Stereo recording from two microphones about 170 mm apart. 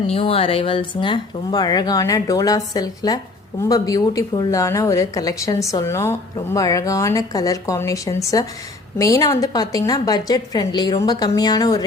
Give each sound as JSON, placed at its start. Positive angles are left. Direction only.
{"t": 0.1, "sound": "a woman's voice", "side_deg": 35}